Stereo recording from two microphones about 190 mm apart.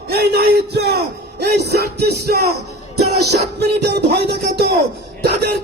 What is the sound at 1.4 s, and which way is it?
Music, 60° right (ahead or behind).